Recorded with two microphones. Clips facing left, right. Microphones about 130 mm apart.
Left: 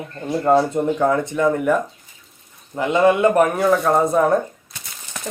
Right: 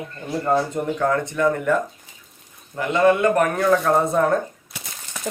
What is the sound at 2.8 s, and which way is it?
Speech, 15° left (ahead or behind).